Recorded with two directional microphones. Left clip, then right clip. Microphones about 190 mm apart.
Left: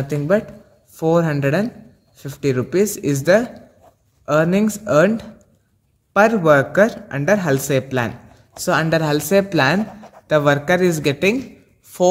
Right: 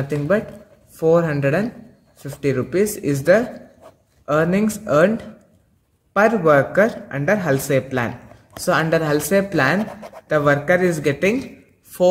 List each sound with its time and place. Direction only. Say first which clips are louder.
0.9 s a man's voice: right 1 dB; 40° left (ahead or behind)